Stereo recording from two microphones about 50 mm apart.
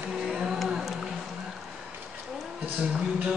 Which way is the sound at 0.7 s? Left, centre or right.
Centre.